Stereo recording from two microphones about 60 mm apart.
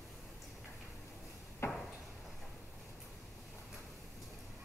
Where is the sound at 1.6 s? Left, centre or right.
Left.